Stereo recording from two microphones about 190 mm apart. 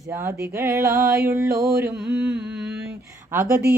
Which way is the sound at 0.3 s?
15° right (ahead or behind).